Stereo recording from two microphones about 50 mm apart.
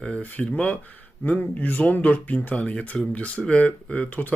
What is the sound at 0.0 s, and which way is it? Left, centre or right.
Speech, left.